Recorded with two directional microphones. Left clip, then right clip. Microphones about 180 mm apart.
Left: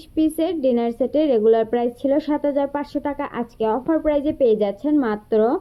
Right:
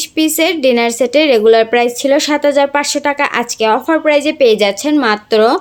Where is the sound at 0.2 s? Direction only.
15° right (ahead or behind).